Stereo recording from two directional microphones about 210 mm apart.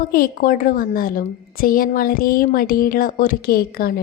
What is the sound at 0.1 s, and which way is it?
A woman's voice, 45° left (ahead or behind).